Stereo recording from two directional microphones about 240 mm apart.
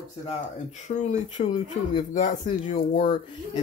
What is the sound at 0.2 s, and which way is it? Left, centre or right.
Speech, left.